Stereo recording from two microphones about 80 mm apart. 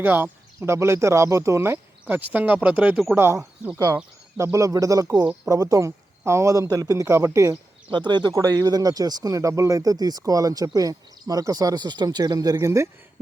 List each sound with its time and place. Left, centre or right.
0.0 s speech: right
3.2 s speech: right
4.5 s speech: right
7.9 s speech: right
8.3 s speech: right
12.5 s speech: right